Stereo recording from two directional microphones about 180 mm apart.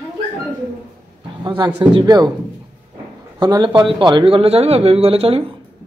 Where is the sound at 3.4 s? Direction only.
25° right (ahead or behind).